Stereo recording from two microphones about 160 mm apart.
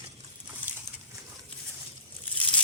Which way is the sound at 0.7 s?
10° right (ahead or behind).